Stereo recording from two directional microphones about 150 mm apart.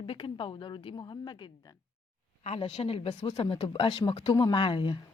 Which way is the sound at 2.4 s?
40° left (ahead or behind).